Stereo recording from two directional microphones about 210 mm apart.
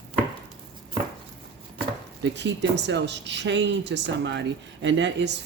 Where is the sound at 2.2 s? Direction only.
55° right (ahead or behind).